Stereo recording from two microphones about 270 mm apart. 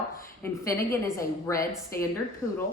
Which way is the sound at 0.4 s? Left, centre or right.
Centre.